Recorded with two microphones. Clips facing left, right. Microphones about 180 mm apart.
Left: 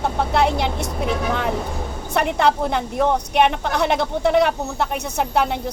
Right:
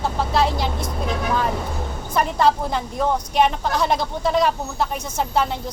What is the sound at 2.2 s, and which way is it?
Speech, 70° left (ahead or behind).